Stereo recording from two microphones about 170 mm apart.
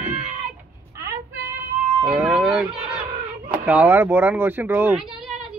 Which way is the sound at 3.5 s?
10° right (ahead or behind).